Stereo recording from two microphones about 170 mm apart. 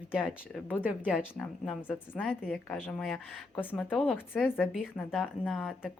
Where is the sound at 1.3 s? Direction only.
5° left (ahead or behind).